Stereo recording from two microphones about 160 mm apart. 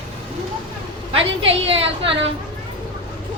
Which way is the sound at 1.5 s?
35° right (ahead or behind).